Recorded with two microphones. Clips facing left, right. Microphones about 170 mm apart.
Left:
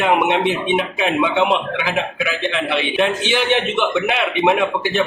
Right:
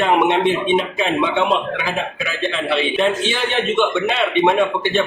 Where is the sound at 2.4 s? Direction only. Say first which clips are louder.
Right 3 dB; 15° left (ahead or behind).